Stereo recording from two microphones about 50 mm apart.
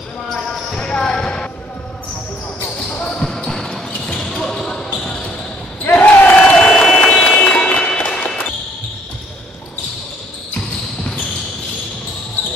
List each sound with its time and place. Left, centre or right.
0.3 s basketball bounce: centre
0.7 s basketball bounce: centre
3.1 s basketball bounce: centre
6.7 s a sound: centre
7.4 s music: left